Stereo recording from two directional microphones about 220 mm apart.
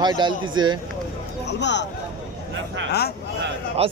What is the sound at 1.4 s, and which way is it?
Speech, 50° left (ahead or behind).